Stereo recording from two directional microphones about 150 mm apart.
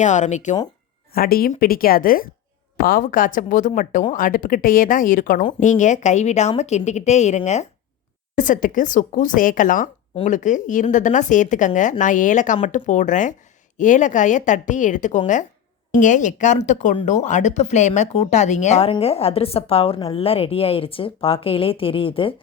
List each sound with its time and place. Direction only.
0.0 s speech: 55° left (ahead or behind)
1.1 s a woman's voice: 80° left; by 7.7 s 50° left (ahead or behind)
8.4 s a woman's voice: 60° left (ahead or behind); by 22.4 s 35° left (ahead or behind)